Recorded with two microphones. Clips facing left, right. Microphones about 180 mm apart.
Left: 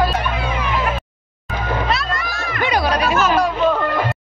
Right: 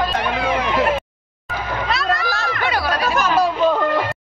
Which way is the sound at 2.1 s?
75° right (ahead or behind).